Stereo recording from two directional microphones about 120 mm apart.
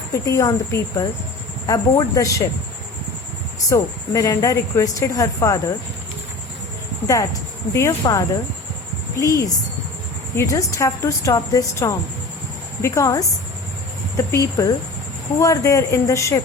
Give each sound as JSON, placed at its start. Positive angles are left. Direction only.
{"t": 0.1, "sound": "speech", "side_deg": 25}
{"t": 3.7, "sound": "speech", "side_deg": 30}
{"t": 7.7, "sound": "speech", "side_deg": 25}